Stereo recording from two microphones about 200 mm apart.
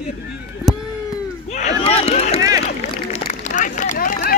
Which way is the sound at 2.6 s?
35° left (ahead or behind).